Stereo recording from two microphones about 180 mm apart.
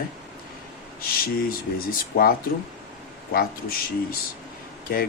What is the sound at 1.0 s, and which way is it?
Speech, 55° left (ahead or behind).